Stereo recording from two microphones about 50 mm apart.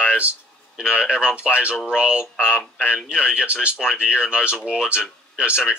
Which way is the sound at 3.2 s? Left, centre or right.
Right.